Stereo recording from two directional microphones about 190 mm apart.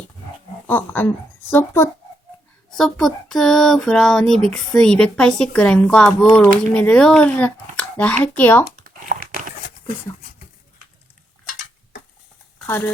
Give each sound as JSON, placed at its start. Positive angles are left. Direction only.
{"t": 0.7, "sound": "speech", "side_deg": 10}
{"t": 8.8, "sound": "crumpling", "side_deg": -50}
{"t": 12.6, "sound": "speech", "side_deg": 10}